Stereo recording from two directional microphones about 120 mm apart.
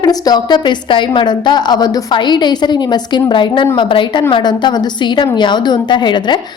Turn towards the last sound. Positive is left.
turn(degrees=40)  # may be behind; listen again after turning